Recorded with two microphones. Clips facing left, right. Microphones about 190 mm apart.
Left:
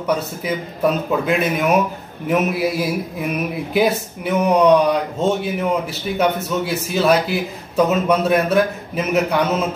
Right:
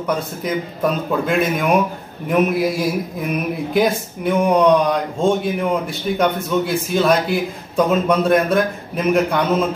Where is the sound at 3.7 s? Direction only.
5° left (ahead or behind).